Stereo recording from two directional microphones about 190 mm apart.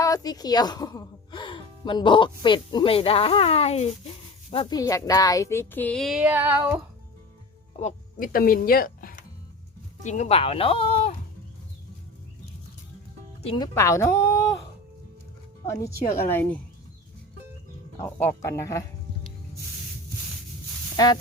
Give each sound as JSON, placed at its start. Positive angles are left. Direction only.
{"t": 0.0, "sound": "speech", "side_deg": 20}
{"t": 7.8, "sound": "speech", "side_deg": 40}
{"t": 10.0, "sound": "speech", "side_deg": 40}
{"t": 13.6, "sound": "speech", "side_deg": 15}
{"t": 15.6, "sound": "speech", "side_deg": 15}
{"t": 18.2, "sound": "speech", "side_deg": 15}